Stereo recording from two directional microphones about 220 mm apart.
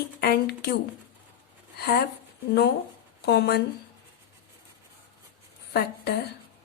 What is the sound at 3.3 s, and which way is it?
Speech, 50° left (ahead or behind).